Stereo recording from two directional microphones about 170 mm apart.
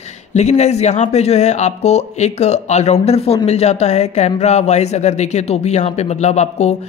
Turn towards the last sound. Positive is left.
turn(degrees=40)  # may be behind; listen again after turning